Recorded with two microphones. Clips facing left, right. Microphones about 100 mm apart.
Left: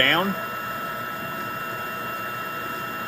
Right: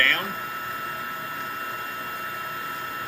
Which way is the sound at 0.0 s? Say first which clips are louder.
Left 4 dB; 45° left (ahead or behind).